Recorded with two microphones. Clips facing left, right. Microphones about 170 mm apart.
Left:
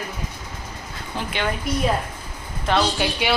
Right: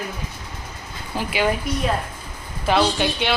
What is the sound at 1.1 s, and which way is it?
Speech, 5° right (ahead or behind).